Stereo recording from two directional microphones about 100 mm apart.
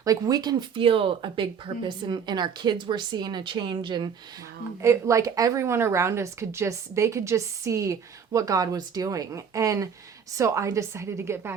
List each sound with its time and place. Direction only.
0.0 s a woman's voice: 40° right (ahead or behind)
0.8 s speech: 65° right (ahead or behind)
4.8 s a woman's voice: 30° right (ahead or behind)